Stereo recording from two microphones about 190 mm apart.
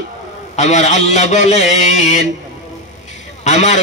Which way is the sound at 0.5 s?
35° left (ahead or behind).